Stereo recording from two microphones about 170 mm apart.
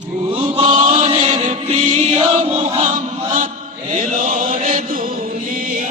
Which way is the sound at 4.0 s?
50° right (ahead or behind).